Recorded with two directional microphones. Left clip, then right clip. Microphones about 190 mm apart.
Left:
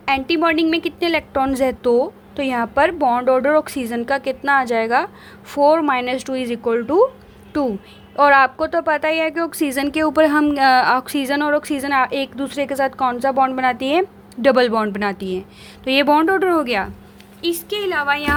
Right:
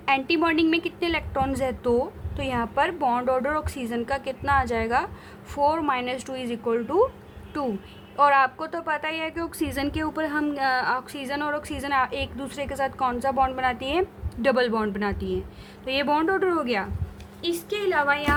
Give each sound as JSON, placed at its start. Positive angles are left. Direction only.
{"t": 0.0, "sound": "a woman's voice", "side_deg": 30}